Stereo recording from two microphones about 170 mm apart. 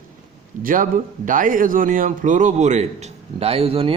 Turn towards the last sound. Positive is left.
turn(degrees=-35)  # may be behind; listen again after turning